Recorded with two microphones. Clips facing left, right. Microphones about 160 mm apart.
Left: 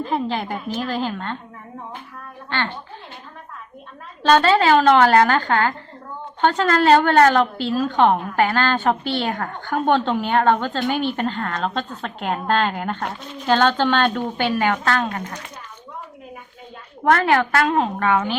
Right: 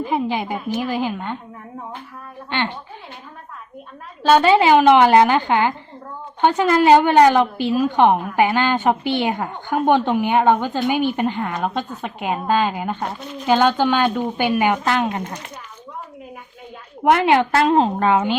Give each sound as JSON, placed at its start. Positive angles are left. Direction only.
{"t": 0.0, "sound": "a woman's voice", "side_deg": -10}
{"t": 2.5, "sound": "a woman's voice", "side_deg": -15}
{"t": 4.3, "sound": "a woman's voice", "side_deg": -10}
{"t": 17.0, "sound": "a woman's voice", "side_deg": -15}